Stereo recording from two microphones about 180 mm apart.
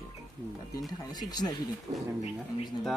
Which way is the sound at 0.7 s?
20° left (ahead or behind).